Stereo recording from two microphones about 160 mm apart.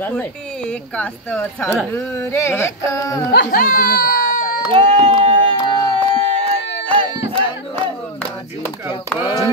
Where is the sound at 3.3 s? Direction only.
80° left.